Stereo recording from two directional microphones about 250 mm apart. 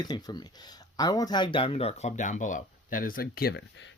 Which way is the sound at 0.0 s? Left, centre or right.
Centre.